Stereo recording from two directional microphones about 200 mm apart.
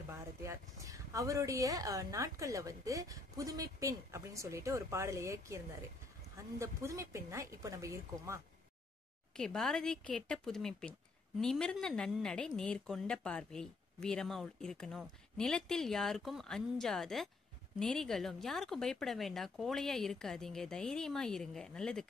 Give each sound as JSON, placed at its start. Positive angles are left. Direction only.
{"t": 0.1, "sound": "speech", "side_deg": -15}
{"t": 9.4, "sound": "a woman's voice", "side_deg": 5}